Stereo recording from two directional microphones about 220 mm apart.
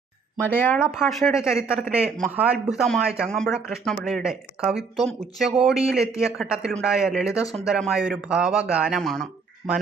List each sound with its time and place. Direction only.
0.4 s speech: 10° left (ahead or behind)
0.9 s speech: centre (ahead or behind)